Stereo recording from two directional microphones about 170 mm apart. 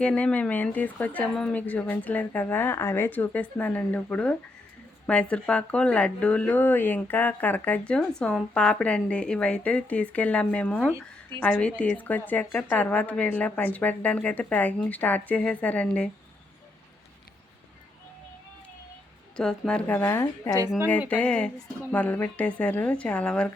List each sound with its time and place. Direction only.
0.0 s speech: 5° left (ahead or behind)
19.4 s speech: 5° left (ahead or behind)